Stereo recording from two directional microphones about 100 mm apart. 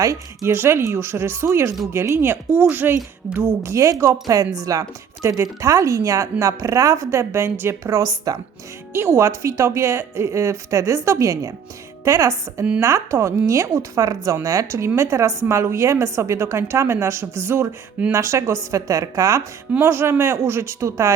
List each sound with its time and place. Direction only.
0.0 s a woman's voice: 30° right (ahead or behind)
8.9 s a woman's voice: 25° right (ahead or behind)
19.7 s a woman's voice: 25° right (ahead or behind)